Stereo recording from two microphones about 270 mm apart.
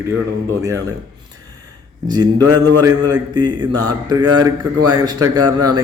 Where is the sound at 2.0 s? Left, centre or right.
Centre.